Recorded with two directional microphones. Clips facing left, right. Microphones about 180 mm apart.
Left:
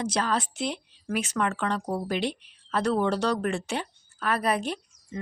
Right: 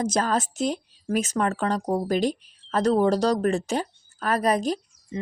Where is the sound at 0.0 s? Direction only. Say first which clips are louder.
Right 3 dB; 45° right (ahead or behind).